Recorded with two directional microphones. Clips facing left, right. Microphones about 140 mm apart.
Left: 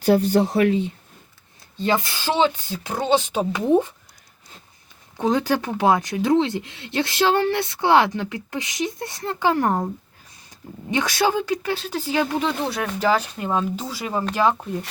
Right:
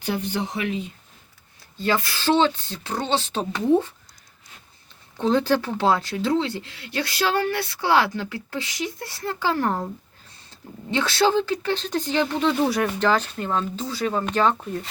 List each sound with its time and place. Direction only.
0.0 s speech: 35° left (ahead or behind)
1.8 s speech: 20° left (ahead or behind)
5.1 s speech: 15° left (ahead or behind); by 13.0 s centre (ahead or behind)
13.0 s speech: 10° left (ahead or behind)